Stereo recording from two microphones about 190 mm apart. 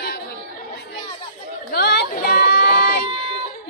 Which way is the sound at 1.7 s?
55° left (ahead or behind).